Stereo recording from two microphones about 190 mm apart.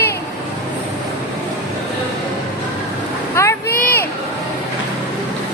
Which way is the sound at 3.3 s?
15° left (ahead or behind).